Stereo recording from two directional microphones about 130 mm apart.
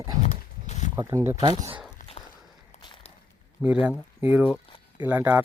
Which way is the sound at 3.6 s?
10° right (ahead or behind).